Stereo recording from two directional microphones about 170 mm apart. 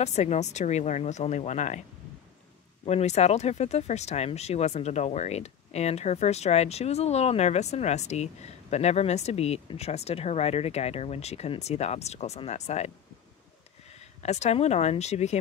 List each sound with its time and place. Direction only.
0.0 s speech: 40° left (ahead or behind)
2.8 s speech: 40° left (ahead or behind)
14.2 s speech: 40° left (ahead or behind)